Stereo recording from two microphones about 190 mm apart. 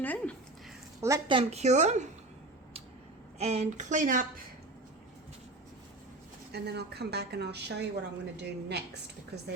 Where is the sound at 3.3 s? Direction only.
35° right (ahead or behind).